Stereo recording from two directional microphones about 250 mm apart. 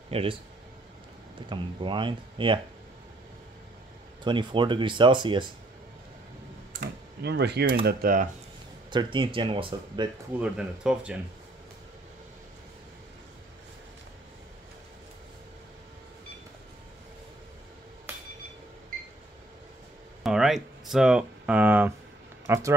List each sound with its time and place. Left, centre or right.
0.1 s speech: right
1.5 s speech: centre
4.2 s speech: centre
6.7 s speech: right
8.9 s speech: centre
10.4 s speech: centre
20.2 s speech: centre